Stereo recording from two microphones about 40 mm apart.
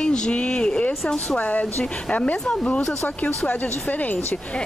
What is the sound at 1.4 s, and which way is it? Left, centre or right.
Speech, left.